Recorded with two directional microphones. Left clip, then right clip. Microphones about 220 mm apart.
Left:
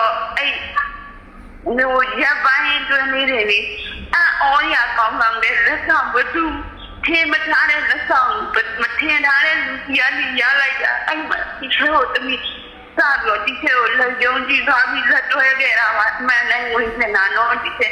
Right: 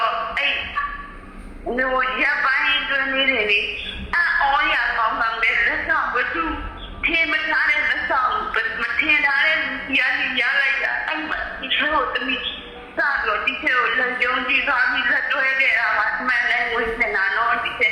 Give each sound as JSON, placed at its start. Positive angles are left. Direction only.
{"t": 1.7, "sound": "a man's voice", "side_deg": 20}